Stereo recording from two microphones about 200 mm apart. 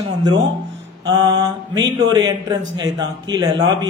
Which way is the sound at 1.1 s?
20° right (ahead or behind).